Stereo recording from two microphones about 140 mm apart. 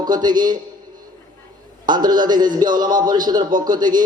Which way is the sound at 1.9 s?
30° right (ahead or behind).